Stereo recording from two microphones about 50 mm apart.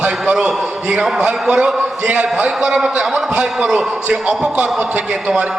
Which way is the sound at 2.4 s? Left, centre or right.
Centre.